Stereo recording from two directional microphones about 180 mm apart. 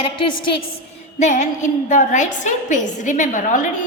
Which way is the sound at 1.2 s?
40° left (ahead or behind).